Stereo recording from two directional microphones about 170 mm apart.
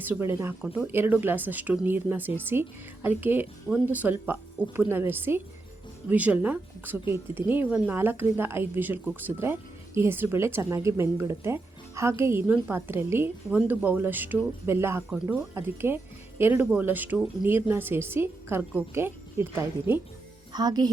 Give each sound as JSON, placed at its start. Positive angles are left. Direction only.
{"t": 0.0, "sound": "speech", "side_deg": -10}